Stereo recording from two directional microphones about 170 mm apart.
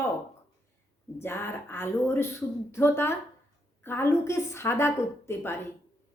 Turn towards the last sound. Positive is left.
turn(degrees=15)  # may be behind; listen again after turning